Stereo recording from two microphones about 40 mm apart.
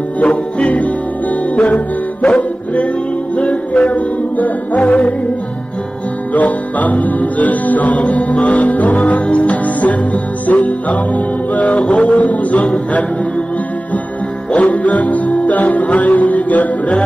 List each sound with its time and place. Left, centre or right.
0.2 s music: left
6.3 s music: left
14.5 s music: left